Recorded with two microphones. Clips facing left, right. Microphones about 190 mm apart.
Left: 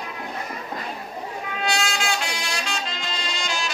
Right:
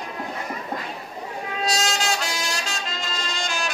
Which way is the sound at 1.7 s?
40° right (ahead or behind).